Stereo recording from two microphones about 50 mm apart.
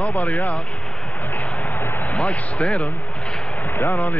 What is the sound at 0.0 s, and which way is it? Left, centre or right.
Speech, left.